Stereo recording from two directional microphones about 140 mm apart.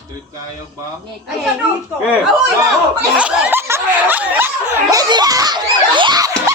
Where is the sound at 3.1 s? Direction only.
10° right (ahead or behind).